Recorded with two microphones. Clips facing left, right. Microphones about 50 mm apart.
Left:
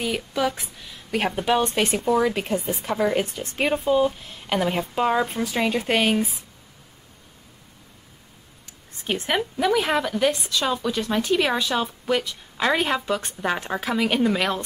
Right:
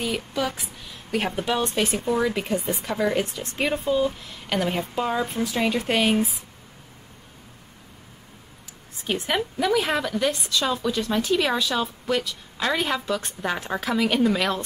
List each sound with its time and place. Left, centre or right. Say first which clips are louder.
0.0 s a woman's voice: left 2 dB; centre
1.6 s speech: left 2 dB; centre
2.0 s a woman's voice: left 4 dB; centre
2.4 s a woman's voice: left 1 dB; centre
5.4 s speech: even; centre
9.1 s a woman's voice: left 1 dB; centre